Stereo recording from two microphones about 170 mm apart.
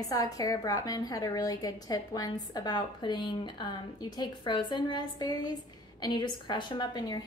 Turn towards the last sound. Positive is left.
turn(degrees=25)  # may be behind; listen again after turning